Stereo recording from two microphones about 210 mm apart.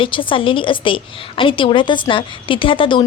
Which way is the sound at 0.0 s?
25° left (ahead or behind).